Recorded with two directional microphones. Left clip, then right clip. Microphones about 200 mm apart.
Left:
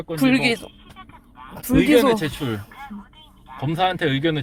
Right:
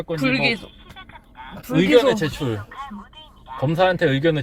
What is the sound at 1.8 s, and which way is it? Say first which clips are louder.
Speech: right 1 dB; 15° left (ahead or behind).